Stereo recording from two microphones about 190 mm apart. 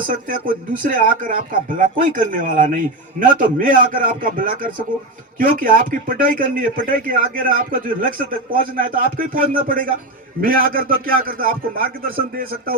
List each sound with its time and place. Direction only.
0.1 s speech: 45° right (ahead or behind)